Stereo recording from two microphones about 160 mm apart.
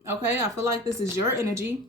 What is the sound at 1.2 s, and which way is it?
Speech, 15° right (ahead or behind).